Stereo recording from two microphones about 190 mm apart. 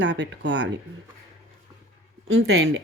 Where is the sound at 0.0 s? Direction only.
70° right (ahead or behind).